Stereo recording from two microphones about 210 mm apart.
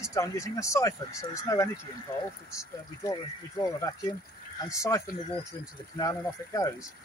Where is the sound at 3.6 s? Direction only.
20° left (ahead or behind).